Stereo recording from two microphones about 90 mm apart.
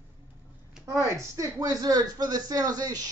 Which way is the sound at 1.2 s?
35° right (ahead or behind).